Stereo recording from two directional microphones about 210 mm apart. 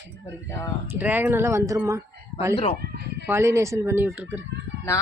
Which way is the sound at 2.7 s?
50° right (ahead or behind).